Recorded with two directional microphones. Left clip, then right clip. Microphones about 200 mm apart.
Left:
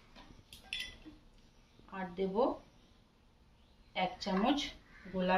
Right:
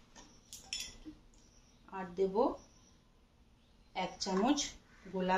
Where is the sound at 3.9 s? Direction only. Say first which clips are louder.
Left 2 dB; 15° right (ahead or behind).